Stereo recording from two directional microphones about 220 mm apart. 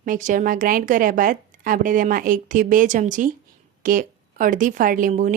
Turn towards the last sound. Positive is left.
turn(degrees=-35)  # may be behind; listen again after turning